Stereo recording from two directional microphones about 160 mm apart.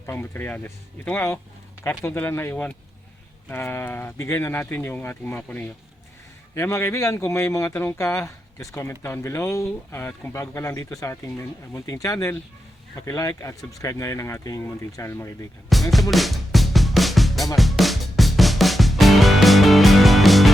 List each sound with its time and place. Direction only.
0.0 s speech: 15° left (ahead or behind)
15.7 s music: centre (ahead or behind)